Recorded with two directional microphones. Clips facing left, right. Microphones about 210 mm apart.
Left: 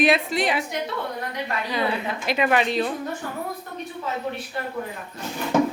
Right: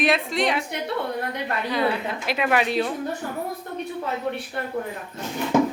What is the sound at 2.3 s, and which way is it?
Speech, centre (ahead or behind).